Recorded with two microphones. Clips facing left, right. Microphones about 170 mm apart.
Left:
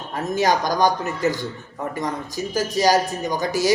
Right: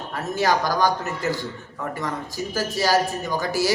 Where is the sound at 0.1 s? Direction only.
20° left (ahead or behind).